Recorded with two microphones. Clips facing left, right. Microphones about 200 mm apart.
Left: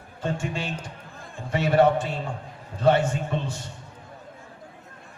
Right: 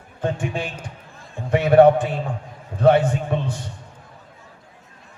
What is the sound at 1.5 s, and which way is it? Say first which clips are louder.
A man's voice: right 7 dB; 55° right (ahead or behind).